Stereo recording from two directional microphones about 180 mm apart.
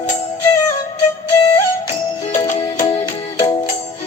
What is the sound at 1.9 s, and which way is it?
Music, 40° left (ahead or behind).